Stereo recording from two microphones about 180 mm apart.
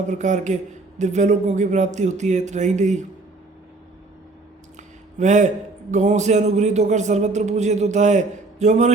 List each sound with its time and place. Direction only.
0.1 s speech: 40° right (ahead or behind)
4.8 s a sound: 40° right (ahead or behind)
5.9 s speech: 40° right (ahead or behind)